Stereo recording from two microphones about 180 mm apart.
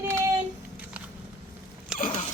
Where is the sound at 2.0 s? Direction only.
40° left (ahead or behind).